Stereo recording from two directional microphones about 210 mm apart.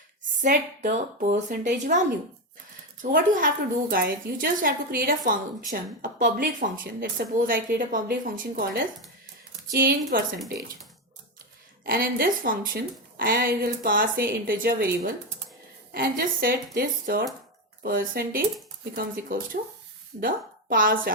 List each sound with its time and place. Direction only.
0.4 s a woman's voice: 40° right (ahead or behind)
3.0 s a woman's voice: 40° right (ahead or behind)
11.9 s a woman's voice: 45° right (ahead or behind)